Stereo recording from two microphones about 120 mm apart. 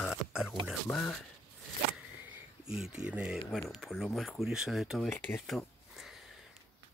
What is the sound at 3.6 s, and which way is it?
Speech, centre (ahead or behind).